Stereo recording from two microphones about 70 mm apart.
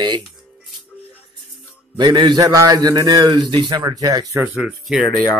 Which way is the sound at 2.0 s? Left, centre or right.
Right.